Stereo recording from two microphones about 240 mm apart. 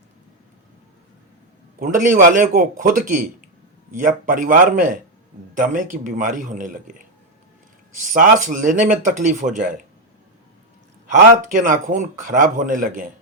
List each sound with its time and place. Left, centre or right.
1.8 s speech: right
11.1 s speech: right